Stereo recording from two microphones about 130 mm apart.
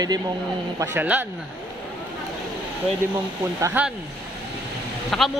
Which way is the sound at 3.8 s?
15° right (ahead or behind).